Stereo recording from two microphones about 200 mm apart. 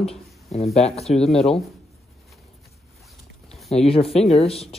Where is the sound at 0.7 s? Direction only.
30° left (ahead or behind).